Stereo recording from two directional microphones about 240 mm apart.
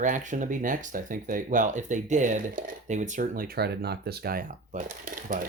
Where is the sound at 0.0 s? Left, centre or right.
Right.